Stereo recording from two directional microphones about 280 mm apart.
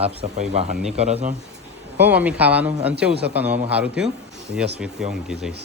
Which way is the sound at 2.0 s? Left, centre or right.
Centre.